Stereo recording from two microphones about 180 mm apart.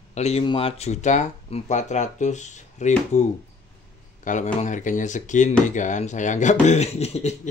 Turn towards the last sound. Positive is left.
turn(degrees=35)  # may be behind; listen again after turning